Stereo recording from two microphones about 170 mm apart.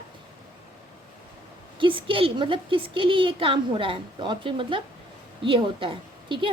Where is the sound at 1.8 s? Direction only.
30° right (ahead or behind).